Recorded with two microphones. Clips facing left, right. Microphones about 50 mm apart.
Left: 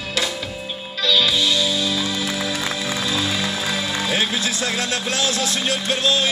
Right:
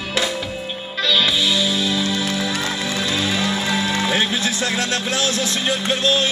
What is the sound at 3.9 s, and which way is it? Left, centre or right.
Music, right.